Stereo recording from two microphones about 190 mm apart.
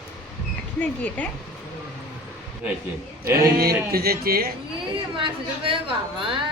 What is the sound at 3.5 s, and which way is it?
Speech, 55° right (ahead or behind).